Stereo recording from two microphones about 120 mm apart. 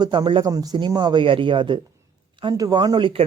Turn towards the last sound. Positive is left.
turn(degrees=-40)  # may be behind; listen again after turning